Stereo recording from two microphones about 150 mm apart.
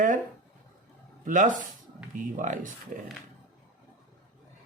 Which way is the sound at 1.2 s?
60° right (ahead or behind).